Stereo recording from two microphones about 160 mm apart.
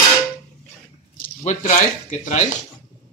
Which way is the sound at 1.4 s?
50° left (ahead or behind).